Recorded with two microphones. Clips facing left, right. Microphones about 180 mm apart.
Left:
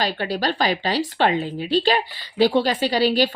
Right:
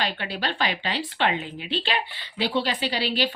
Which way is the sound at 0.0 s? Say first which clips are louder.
Left 6 dB; 40° left (ahead or behind).